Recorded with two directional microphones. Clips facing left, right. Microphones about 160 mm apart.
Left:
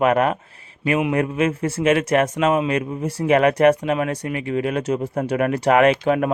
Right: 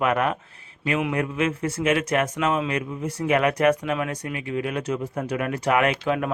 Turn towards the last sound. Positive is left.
turn(degrees=30)  # may be behind; listen again after turning